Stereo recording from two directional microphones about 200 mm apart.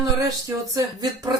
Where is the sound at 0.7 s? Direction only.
20° right (ahead or behind).